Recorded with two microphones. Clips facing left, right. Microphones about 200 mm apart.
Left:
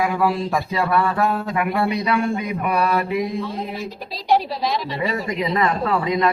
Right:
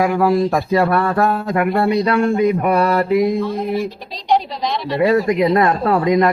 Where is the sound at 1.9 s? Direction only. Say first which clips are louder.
Right 5 dB; 55° right (ahead or behind).